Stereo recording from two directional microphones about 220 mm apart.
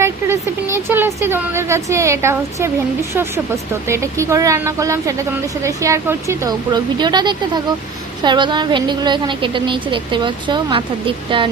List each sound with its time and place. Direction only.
0.0 s a woman's voice: 10° right (ahead or behind)